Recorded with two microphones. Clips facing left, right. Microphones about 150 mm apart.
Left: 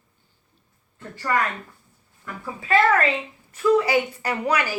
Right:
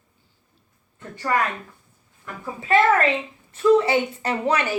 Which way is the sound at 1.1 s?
20° right (ahead or behind).